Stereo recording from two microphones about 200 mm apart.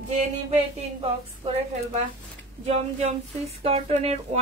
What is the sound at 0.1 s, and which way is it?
Speech, 35° right (ahead or behind).